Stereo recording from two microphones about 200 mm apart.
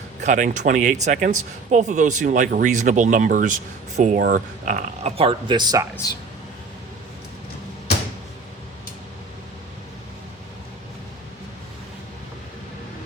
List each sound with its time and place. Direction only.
0.2 s speech: 40° right (ahead or behind); by 5.8 s 20° right (ahead or behind)